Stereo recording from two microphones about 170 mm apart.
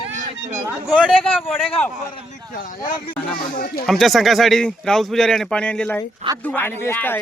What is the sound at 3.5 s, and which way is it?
Speech, 55° left (ahead or behind).